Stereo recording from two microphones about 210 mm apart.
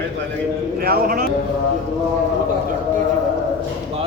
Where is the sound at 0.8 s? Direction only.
45° right (ahead or behind).